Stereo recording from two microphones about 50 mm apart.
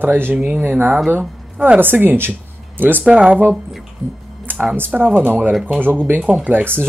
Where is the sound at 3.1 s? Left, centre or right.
Right.